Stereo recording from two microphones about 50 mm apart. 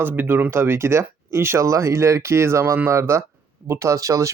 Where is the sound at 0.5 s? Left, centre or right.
Right.